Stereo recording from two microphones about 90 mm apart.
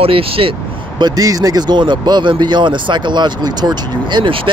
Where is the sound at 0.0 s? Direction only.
90° right.